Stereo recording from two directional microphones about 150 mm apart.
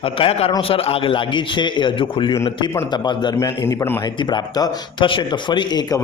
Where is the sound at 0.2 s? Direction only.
40° left (ahead or behind).